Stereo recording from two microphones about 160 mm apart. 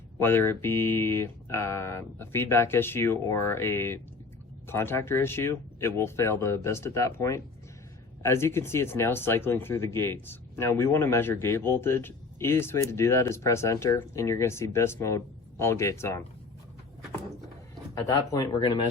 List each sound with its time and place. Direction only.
0.2 s speech: 15° left (ahead or behind)
17.9 s speech: 20° left (ahead or behind)